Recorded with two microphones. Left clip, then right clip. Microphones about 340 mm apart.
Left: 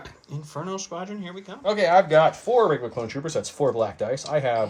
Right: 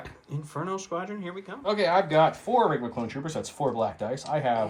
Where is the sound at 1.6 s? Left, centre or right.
Left.